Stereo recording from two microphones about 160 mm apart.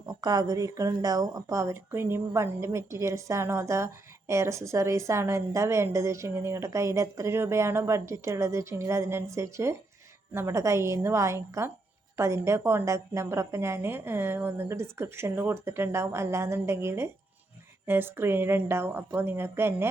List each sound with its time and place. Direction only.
0.0 s speech: 25° right (ahead or behind)